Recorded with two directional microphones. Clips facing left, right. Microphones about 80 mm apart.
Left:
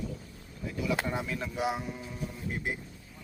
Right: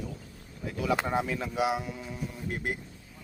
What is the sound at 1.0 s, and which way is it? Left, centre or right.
Speech, right.